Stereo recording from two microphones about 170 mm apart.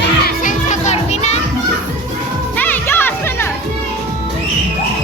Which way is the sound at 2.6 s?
10° left (ahead or behind).